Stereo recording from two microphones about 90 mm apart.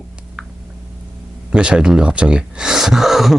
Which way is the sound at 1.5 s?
10° right (ahead or behind).